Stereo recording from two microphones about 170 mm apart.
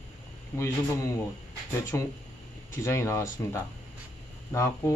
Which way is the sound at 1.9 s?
15° left (ahead or behind).